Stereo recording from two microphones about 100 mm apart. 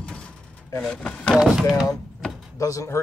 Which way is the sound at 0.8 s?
5° left (ahead or behind).